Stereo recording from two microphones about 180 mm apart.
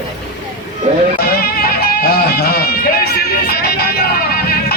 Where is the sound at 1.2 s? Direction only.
55° left (ahead or behind).